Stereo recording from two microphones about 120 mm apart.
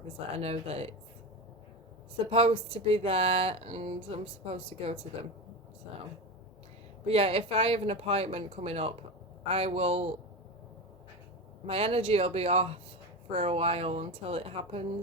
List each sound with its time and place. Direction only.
0.3 s speech: 60° right (ahead or behind)
2.1 s speech: 50° right (ahead or behind)
7.1 s speech: 55° right (ahead or behind)
11.6 s speech: 55° right (ahead or behind)